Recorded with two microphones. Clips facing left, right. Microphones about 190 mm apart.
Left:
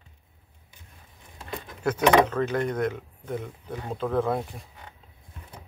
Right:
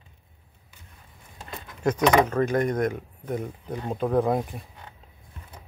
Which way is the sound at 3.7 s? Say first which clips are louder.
Right 3 dB; 15° right (ahead or behind).